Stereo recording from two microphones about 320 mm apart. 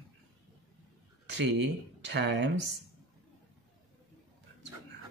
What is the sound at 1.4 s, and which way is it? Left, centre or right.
Speech, right.